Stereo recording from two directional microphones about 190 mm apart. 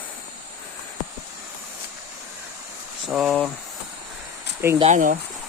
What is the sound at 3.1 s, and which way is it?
Speech, 5° right (ahead or behind).